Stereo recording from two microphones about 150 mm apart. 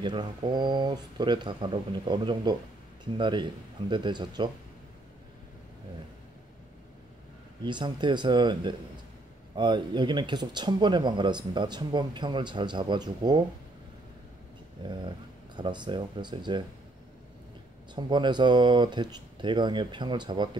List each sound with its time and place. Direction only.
0.0 s speech: 30° right (ahead or behind)
7.6 s speech: 30° right (ahead or behind)
14.9 s speech: 30° right (ahead or behind)
17.9 s speech: 30° right (ahead or behind)